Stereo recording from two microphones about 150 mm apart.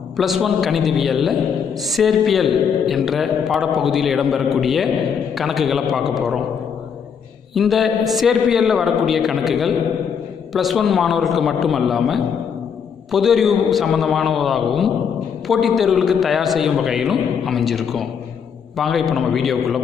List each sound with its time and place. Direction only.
0.2 s a man's voice: centre (ahead or behind)
7.5 s a man's voice: centre (ahead or behind)